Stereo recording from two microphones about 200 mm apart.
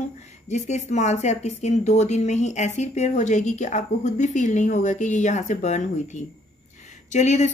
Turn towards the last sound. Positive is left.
turn(degrees=35)  # may be behind; listen again after turning